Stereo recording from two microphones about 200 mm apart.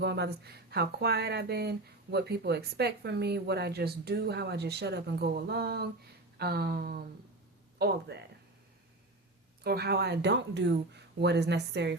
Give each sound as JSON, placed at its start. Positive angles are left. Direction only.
{"t": 0.0, "sound": "speech", "side_deg": -55}
{"t": 9.6, "sound": "speech", "side_deg": -55}